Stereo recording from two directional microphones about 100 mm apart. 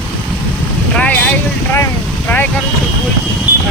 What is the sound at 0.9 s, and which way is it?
Speech, 10° left (ahead or behind).